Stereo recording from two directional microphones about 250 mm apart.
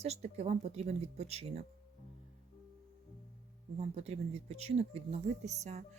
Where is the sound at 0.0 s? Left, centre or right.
Right.